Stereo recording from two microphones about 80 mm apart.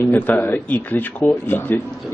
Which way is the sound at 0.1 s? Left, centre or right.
Left.